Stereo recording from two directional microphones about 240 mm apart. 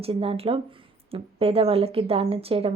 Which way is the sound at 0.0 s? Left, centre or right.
Right.